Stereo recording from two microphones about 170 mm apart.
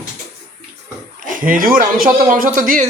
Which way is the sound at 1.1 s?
50° right (ahead or behind).